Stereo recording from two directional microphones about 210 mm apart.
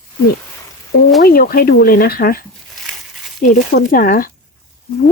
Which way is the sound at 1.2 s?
45° left (ahead or behind).